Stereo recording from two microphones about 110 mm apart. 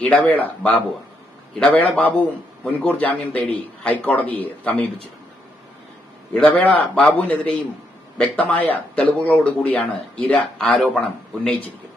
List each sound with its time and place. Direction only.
0.0 s speech: 15° left (ahead or behind)
6.3 s speech: 15° left (ahead or behind)
10.7 s speech: centre (ahead or behind)
11.4 s speech: 15° left (ahead or behind)